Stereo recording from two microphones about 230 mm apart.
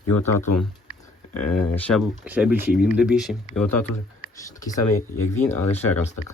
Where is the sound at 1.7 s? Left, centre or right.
Centre.